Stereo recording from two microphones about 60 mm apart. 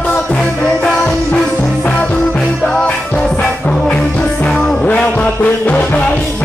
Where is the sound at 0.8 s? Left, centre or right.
Centre.